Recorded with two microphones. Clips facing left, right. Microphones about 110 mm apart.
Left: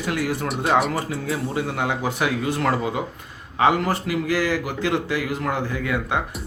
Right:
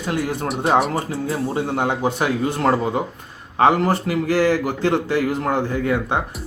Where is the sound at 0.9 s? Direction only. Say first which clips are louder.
Right 3 dB; 30° right (ahead or behind).